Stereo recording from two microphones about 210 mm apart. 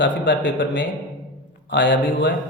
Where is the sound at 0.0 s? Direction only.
60° left (ahead or behind).